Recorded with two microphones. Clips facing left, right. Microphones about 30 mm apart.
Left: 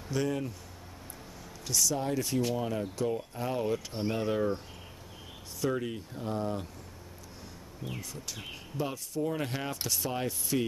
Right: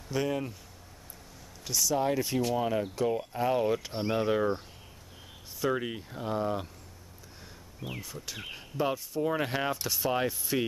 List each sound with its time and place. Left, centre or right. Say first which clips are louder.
0.1 s speech: right 1 dB; centre
1.7 s speech: right 2 dB; centre
5.7 s speech: right 2 dB; right
8.0 s speech: right 1 dB; centre